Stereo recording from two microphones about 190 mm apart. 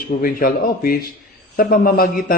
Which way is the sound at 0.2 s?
50° left (ahead or behind).